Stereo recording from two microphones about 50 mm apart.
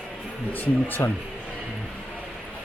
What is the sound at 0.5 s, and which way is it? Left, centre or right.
Speech, left.